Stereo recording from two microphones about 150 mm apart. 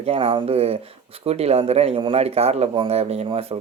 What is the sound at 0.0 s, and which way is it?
Speech, 40° right (ahead or behind).